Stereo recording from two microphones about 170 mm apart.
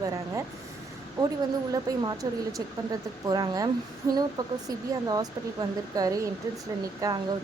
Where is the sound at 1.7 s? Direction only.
20° right (ahead or behind).